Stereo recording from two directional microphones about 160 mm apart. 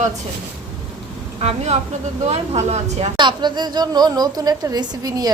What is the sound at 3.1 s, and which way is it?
A woman's voice, 30° right (ahead or behind).